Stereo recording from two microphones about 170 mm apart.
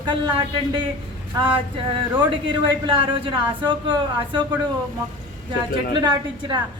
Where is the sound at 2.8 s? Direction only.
30° right (ahead or behind).